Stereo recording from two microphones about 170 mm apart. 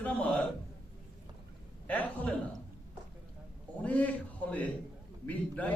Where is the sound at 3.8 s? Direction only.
10° left (ahead or behind).